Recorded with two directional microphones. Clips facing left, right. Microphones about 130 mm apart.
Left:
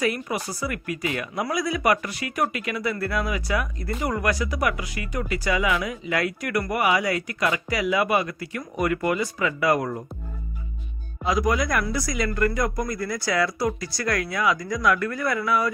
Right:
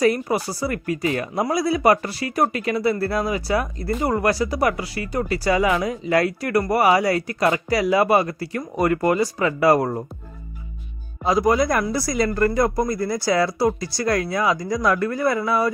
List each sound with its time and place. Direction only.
0.0 s speech: 35° right (ahead or behind)
11.2 s speech: 30° right (ahead or behind)